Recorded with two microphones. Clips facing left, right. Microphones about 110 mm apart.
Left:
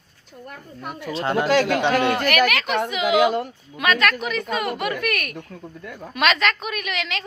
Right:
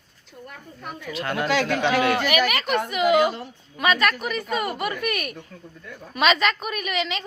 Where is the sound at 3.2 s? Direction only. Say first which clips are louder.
Left 3 dB; 65° left (ahead or behind).